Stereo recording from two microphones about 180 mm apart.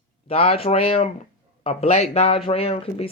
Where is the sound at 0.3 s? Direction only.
35° left (ahead or behind).